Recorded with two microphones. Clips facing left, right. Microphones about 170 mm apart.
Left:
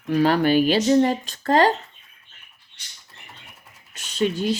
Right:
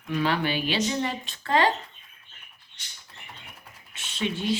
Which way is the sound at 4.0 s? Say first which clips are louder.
Left 7 dB; 40° left (ahead or behind).